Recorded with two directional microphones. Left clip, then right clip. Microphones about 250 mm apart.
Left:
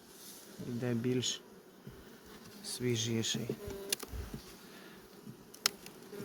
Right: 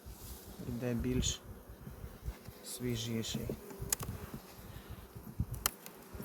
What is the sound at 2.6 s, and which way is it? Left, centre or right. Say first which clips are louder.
Speech: left 5 dB; left.